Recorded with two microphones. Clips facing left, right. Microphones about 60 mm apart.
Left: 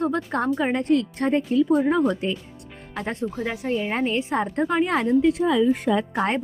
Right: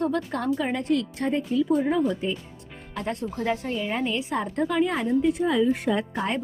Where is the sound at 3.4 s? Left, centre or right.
Centre.